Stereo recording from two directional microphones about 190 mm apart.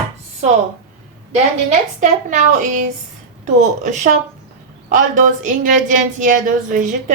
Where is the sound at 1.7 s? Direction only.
40° right (ahead or behind).